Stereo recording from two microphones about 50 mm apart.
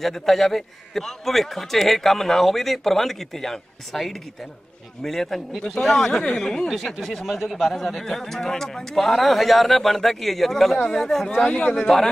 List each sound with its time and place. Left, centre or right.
0.0 s a man's voice: centre
6.7 s a man's voice: centre
11.2 s speech: centre